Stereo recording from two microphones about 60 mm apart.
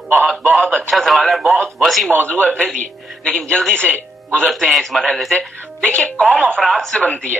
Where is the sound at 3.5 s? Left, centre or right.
Centre.